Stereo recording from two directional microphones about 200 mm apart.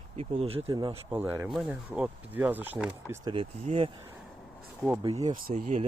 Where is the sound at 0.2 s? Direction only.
30° right (ahead or behind).